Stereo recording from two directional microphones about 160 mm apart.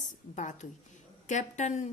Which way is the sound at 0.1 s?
50° left (ahead or behind).